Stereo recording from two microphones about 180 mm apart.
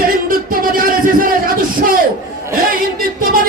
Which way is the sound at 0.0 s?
50° right (ahead or behind).